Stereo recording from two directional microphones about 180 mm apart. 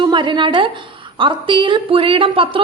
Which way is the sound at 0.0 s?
25° right (ahead or behind).